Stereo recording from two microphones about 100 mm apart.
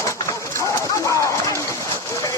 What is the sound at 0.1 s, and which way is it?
Clip-clop, 30° left (ahead or behind).